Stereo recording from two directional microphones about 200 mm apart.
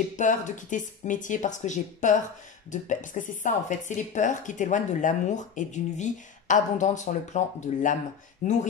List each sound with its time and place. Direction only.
0.1 s a woman's voice: 40° left (ahead or behind)